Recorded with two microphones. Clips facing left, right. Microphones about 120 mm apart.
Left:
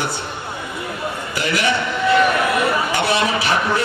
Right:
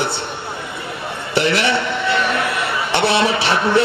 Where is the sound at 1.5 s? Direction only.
30° right (ahead or behind).